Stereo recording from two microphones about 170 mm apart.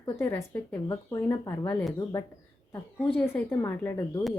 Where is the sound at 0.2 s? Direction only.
15° left (ahead or behind).